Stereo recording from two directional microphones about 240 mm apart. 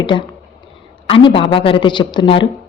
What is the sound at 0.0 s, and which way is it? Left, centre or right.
A woman's voice, centre.